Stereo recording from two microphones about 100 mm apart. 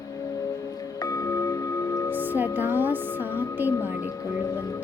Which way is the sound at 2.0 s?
20° right (ahead or behind).